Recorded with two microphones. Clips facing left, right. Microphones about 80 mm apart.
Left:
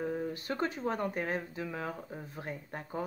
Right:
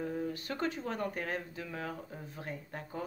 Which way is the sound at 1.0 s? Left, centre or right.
Left.